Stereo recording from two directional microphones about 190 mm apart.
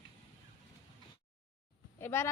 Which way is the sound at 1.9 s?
15° left (ahead or behind).